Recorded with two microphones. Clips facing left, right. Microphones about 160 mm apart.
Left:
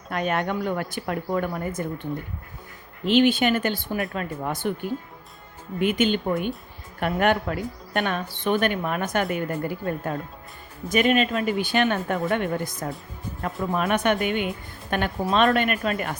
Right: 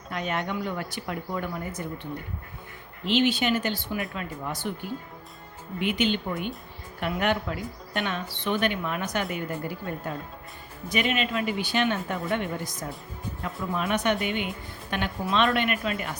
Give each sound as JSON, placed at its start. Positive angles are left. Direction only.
{"t": 0.1, "sound": "speech", "side_deg": 55}
{"t": 3.1, "sound": "speech", "side_deg": 50}
{"t": 5.8, "sound": "speech", "side_deg": 45}